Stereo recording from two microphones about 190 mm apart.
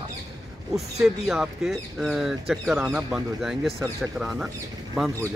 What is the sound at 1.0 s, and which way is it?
Speech, centre (ahead or behind).